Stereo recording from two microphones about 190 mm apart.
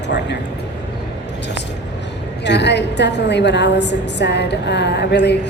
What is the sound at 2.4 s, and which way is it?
A woman's voice, 65° left (ahead or behind).